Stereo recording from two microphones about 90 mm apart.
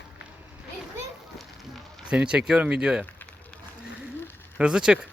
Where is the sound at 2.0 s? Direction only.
10° right (ahead or behind).